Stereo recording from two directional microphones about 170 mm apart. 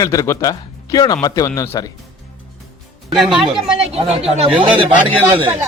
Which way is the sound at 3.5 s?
35° right (ahead or behind).